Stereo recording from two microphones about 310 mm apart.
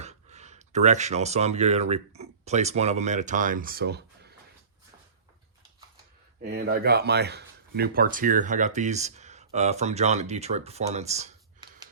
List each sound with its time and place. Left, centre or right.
0.0 s speech: right
6.4 s speech: right